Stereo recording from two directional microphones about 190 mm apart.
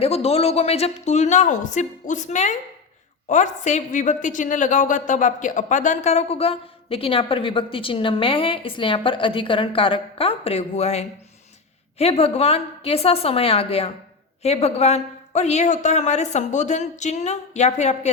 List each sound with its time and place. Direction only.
0.0 s a woman's voice: 30° left (ahead or behind)